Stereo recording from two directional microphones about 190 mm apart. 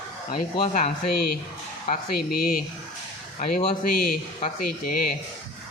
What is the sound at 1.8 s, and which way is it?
Speech, 45° left (ahead or behind).